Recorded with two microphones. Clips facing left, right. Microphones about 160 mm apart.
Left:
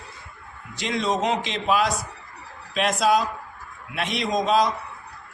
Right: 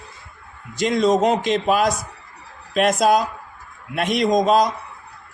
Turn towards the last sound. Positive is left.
turn(degrees=-45)  # may be behind; listen again after turning